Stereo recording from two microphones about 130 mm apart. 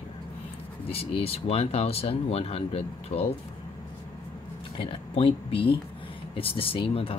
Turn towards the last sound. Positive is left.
turn(degrees=45)  # may be behind; listen again after turning